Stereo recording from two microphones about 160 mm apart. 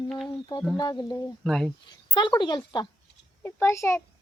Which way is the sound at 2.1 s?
25° left (ahead or behind).